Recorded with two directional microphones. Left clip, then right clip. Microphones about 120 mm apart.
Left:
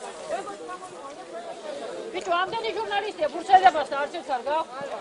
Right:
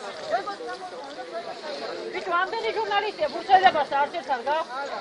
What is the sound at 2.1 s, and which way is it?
Speech, 15° right (ahead or behind).